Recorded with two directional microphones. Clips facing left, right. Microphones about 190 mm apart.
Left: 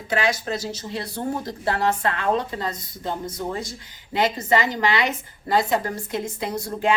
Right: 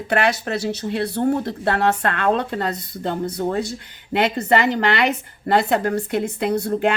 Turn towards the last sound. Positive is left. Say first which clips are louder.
# right 4 dB
turn(degrees=-60)  # may be behind; listen again after turning